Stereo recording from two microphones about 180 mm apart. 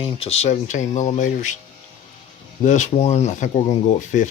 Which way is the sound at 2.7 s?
40° left (ahead or behind).